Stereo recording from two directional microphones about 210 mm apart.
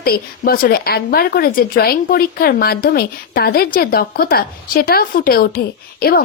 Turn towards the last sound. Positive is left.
turn(degrees=45)  # may be behind; listen again after turning